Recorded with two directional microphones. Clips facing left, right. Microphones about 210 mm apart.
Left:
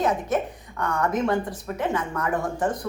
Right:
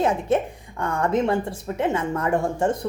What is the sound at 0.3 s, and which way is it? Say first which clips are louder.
Speech: right 3 dB; 30° right (ahead or behind).